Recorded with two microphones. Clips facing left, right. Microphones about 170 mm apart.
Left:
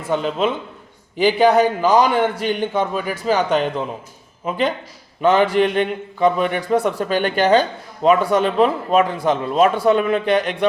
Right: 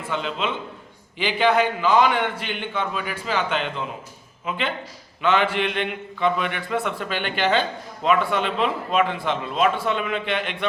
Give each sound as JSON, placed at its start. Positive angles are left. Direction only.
{"t": 0.1, "sound": "a man's voice", "side_deg": 45}